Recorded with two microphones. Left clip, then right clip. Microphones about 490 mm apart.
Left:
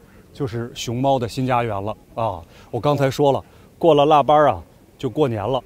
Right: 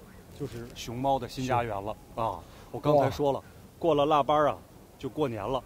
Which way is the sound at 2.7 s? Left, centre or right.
Left.